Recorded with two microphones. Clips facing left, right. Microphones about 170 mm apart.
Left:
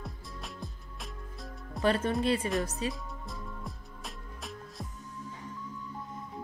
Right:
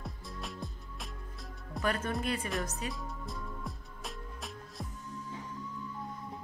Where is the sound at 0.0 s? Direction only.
Centre (ahead or behind).